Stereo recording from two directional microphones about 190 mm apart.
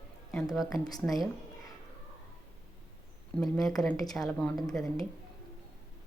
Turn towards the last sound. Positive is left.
turn(degrees=0)  # may be behind; listen again after turning